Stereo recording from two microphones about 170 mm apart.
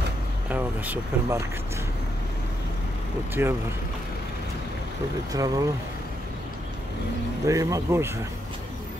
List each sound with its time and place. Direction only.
0.5 s speech: 10° right (ahead or behind)
3.4 s speech: 15° right (ahead or behind)
5.3 s speech: 20° right (ahead or behind)
7.4 s speech: 20° right (ahead or behind)